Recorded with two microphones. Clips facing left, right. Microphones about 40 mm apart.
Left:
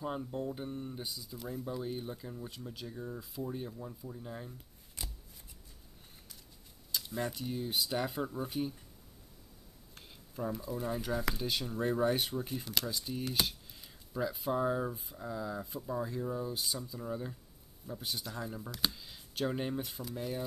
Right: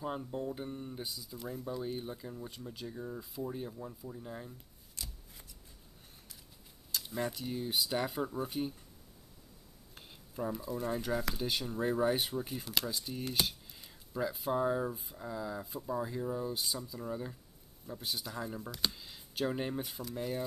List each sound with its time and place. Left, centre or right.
0.0 s speech: centre
5.0 s shuffling cards: left
7.0 s speech: centre
9.9 s speech: centre